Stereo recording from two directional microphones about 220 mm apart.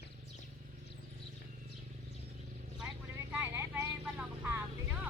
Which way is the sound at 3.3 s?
10° right (ahead or behind).